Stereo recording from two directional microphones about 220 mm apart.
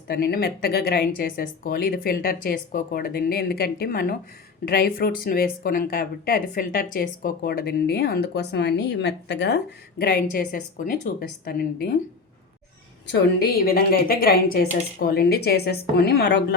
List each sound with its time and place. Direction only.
0.1 s speech: 45° left (ahead or behind)
13.1 s speech: 45° left (ahead or behind)